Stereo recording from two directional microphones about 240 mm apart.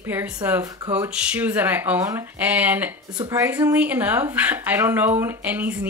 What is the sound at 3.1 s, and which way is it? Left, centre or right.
Speech, centre.